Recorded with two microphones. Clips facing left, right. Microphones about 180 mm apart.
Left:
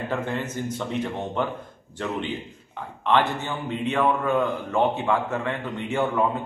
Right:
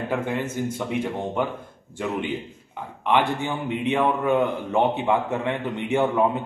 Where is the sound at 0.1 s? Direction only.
10° right (ahead or behind).